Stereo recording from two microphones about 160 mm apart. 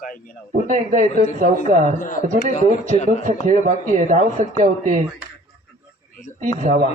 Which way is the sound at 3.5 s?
50° right (ahead or behind).